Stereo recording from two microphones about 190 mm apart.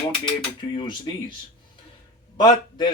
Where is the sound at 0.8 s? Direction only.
25° left (ahead or behind).